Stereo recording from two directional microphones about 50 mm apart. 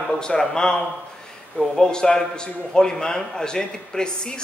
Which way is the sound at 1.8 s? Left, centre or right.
Centre.